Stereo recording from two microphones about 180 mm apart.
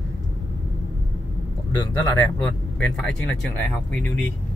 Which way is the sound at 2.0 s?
20° left (ahead or behind).